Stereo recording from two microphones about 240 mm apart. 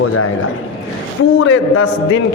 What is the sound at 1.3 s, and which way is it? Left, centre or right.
Speech, left.